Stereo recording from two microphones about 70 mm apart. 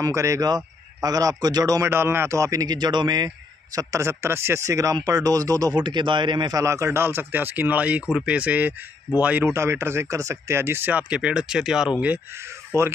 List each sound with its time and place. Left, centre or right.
0.0 s speech: right
0.5 s speech: right
1.8 s speech: right
2.6 s a man's voice: right
3.7 s speech: right
5.0 s speech: right
5.8 s a man's voice: right
6.6 s speech: right
9.4 s speech: right
10.9 s speech: centre
12.7 s speech: right